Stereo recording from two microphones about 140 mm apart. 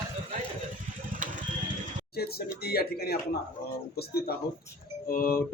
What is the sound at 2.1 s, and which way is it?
Speech, 90° left.